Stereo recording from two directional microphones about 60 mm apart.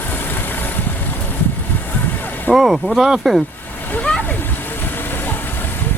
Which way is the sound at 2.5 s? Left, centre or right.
Centre.